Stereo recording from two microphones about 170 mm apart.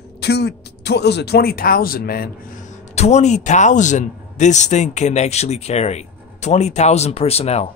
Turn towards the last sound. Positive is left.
turn(degrees=40)  # may be behind; listen again after turning